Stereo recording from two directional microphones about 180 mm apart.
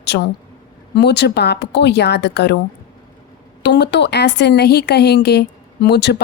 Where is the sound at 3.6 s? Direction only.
70° left (ahead or behind).